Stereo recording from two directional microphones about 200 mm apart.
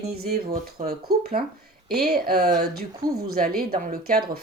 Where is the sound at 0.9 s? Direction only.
50° right (ahead or behind).